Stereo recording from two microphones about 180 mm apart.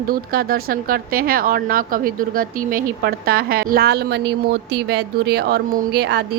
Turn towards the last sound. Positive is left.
turn(degrees=-65)  # may be behind; listen again after turning